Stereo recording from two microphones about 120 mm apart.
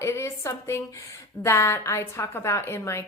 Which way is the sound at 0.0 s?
20° left (ahead or behind).